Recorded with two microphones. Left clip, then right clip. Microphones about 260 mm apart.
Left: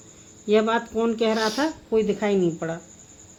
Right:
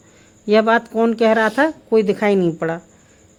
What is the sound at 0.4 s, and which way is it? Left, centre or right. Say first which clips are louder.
Speech: right 6 dB; right.